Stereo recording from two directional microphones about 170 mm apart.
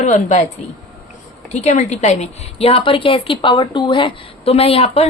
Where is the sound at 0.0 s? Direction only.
45° left (ahead or behind).